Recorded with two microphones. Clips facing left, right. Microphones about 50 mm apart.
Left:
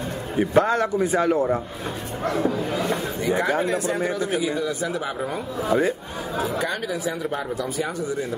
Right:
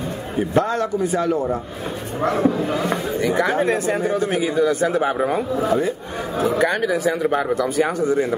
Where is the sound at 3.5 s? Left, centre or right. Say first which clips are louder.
Right 4 dB; right.